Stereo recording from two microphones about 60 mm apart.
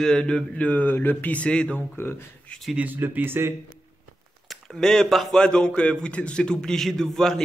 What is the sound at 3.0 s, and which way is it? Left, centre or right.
Speech, right.